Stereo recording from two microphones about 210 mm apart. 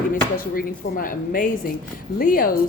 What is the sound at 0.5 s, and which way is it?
A woman's voice, 40° left (ahead or behind).